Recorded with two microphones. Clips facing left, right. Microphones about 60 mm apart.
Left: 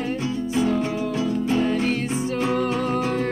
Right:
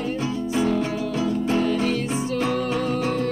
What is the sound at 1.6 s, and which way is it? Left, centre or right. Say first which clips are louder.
Music: even; left.